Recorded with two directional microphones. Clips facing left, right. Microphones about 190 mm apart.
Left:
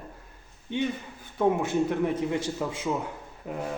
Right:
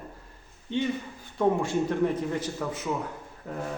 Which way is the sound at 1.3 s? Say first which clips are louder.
Left 1 dB; 20° left (ahead or behind).